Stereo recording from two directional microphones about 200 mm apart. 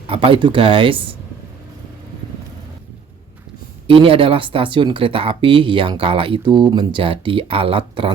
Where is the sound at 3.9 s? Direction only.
25° right (ahead or behind).